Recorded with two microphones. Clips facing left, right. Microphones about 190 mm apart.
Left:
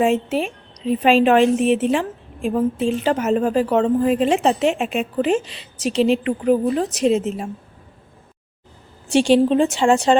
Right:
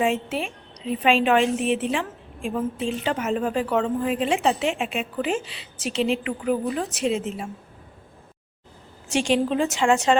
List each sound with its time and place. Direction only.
0.0 s a woman's voice: 40° left (ahead or behind)
9.0 s a woman's voice: 30° left (ahead or behind)